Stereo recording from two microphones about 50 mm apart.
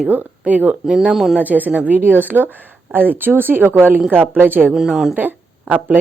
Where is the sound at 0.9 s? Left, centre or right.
Centre.